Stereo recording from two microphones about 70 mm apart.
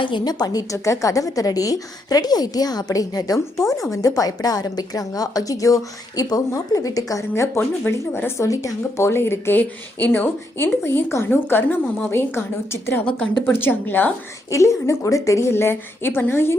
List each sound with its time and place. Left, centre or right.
0.1 s a woman's voice: left
0.9 s a woman's voice: left
7.3 s speech: left
8.4 s speech: left
13.1 s a woman's voice: centre
13.4 s speech: left
14.5 s speech: left